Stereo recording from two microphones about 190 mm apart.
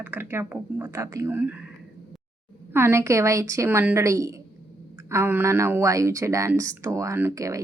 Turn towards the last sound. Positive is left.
turn(degrees=-15)  # may be behind; listen again after turning